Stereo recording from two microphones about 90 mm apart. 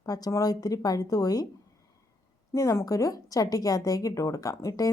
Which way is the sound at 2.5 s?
35° left (ahead or behind).